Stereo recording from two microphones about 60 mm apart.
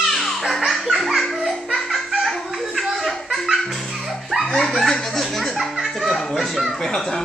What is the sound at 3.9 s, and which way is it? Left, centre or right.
Music, centre.